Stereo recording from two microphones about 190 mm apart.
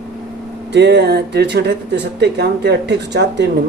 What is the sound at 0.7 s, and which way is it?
Speech, 60° right (ahead or behind).